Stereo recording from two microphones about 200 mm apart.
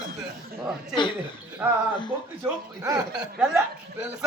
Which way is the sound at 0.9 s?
25° left (ahead or behind).